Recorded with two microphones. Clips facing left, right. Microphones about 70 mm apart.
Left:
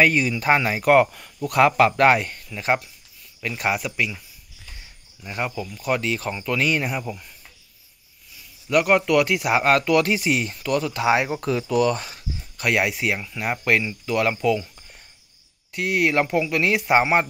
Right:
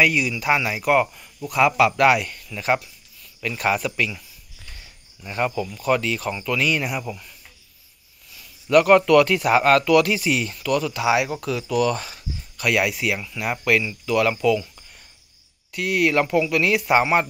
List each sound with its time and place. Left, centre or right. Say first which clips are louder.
0.0 s speech: left 1 dB; left
1.7 s speech: right 2 dB; left; by 4.2 s centre
5.8 s speech: right 2 dB; left
8.6 s speech: right 4 dB; centre
15.7 s speech: right 1 dB; left